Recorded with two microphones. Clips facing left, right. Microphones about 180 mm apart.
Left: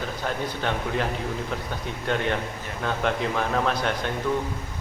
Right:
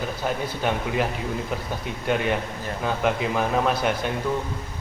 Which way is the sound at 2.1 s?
10° right (ahead or behind).